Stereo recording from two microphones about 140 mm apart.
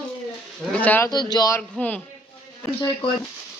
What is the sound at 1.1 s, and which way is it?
Speech, 30° left (ahead or behind).